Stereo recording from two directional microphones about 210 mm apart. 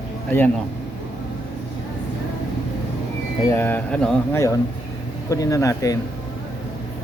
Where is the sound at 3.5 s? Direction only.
10° left (ahead or behind).